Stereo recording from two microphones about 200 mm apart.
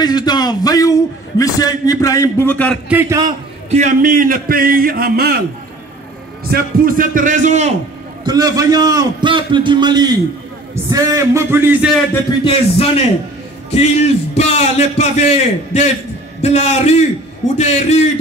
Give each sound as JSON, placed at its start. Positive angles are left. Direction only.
{"t": 0.0, "sound": "a man's voice", "side_deg": 20}
{"t": 2.9, "sound": "music", "side_deg": -10}
{"t": 3.7, "sound": "a man's voice", "side_deg": -40}
{"t": 6.4, "sound": "a man's voice", "side_deg": -45}
{"t": 8.2, "sound": "a man's voice", "side_deg": -20}
{"t": 10.9, "sound": "music", "side_deg": -15}
{"t": 12.4, "sound": "a man's voice", "side_deg": 30}